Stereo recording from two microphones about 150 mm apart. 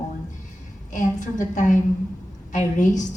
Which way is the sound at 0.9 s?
60° left (ahead or behind).